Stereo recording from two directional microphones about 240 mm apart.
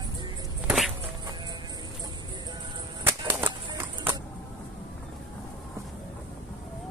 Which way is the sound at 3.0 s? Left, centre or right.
Centre.